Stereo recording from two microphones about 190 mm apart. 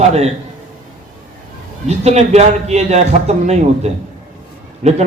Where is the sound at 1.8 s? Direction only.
35° right (ahead or behind).